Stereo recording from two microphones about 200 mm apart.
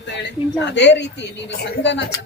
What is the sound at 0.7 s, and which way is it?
A man's voice, 60° left (ahead or behind).